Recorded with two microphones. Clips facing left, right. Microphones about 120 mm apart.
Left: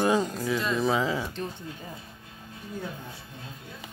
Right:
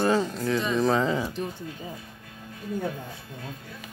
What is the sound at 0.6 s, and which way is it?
Speech, centre (ahead or behind).